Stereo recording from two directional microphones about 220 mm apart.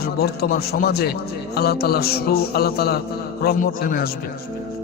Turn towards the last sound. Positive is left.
turn(degrees=40)  # may be behind; listen again after turning